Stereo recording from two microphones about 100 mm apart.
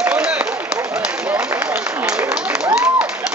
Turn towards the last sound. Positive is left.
turn(degrees=-20)  # may be behind; listen again after turning